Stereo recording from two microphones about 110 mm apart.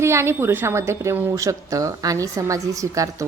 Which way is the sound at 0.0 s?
25° right (ahead or behind).